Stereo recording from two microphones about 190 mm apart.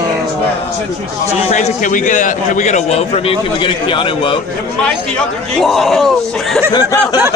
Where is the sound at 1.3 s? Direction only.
40° left (ahead or behind).